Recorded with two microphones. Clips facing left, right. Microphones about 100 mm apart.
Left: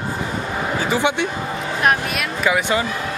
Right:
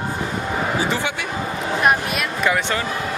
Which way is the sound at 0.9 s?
20° left (ahead or behind).